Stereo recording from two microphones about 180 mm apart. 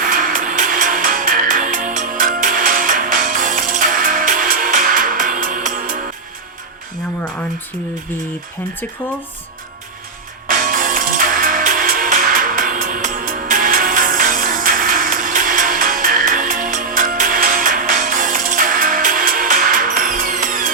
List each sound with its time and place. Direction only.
0.0 s music: 50° right (ahead or behind)
10.5 s music: 50° right (ahead or behind)